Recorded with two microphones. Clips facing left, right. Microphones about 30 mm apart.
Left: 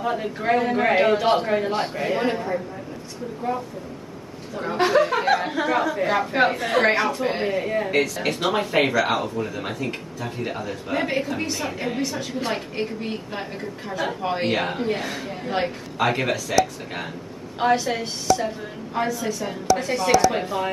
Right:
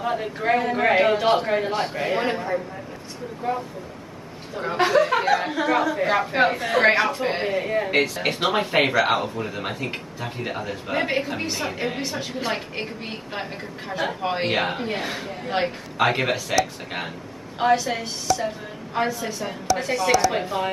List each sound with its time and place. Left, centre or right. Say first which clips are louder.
0.0 s a man's voice: even; centre
6.8 s speech: right 2 dB; centre
7.9 s a man's voice: even; right
17.6 s a man's voice: even; centre
18.9 s speech: even; centre
19.4 s a man's voice: left 2 dB; centre